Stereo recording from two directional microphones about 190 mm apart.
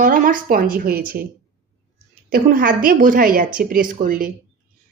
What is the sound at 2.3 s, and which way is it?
A woman's voice, 50° right (ahead or behind).